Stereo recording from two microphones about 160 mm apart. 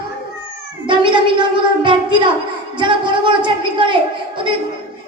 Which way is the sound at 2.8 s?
30° right (ahead or behind).